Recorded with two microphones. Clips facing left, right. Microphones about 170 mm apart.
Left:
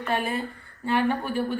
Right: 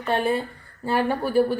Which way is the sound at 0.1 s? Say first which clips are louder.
Right 5 dB; 30° right (ahead or behind).